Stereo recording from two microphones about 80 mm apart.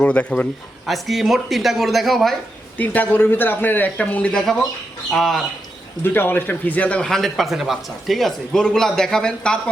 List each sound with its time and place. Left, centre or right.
0.0 s speech: centre
0.9 s speech: centre
2.7 s a man's voice: left
4.4 s speech: centre
6.0 s a man's voice: left
7.0 s speech: centre